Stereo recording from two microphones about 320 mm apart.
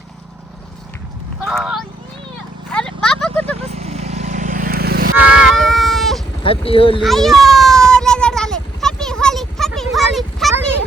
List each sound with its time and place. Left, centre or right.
1.5 s speech: centre
2.7 s a sound: centre
3.6 s vehicle: centre
5.3 s baby cry: centre
6.7 s a child's voice: centre
7.0 s a sound: centre